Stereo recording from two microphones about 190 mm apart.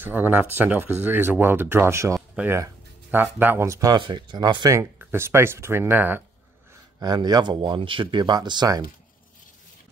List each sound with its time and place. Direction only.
0.0 s speech: 10° right (ahead or behind)
7.0 s speech: 20° right (ahead or behind)